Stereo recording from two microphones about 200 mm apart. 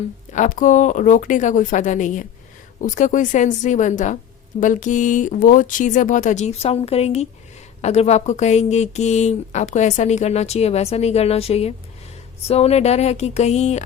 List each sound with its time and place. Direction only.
0.3 s speech: 40° left (ahead or behind)